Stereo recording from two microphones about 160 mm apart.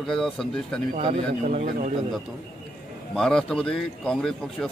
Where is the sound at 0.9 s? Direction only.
45° right (ahead or behind).